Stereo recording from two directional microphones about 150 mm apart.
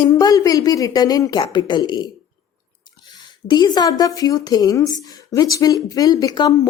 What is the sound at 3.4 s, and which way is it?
Speech, 30° left (ahead or behind).